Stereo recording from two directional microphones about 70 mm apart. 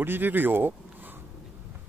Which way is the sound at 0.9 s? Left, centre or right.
Right.